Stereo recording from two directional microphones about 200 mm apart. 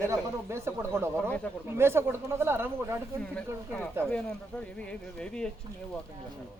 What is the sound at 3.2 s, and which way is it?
Speech, 5° left (ahead or behind).